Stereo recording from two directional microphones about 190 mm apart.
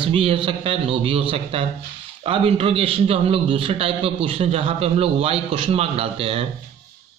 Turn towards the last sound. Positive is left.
turn(degrees=-30)  # may be behind; listen again after turning